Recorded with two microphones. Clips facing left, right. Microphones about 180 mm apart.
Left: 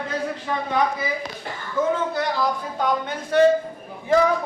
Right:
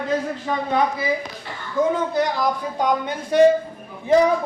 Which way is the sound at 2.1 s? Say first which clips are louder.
Right 2 dB; 15° right (ahead or behind).